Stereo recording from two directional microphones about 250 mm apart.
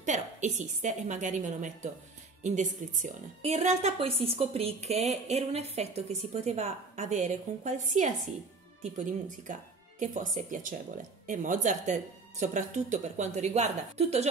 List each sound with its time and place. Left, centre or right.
0.0 s a woman's voice: right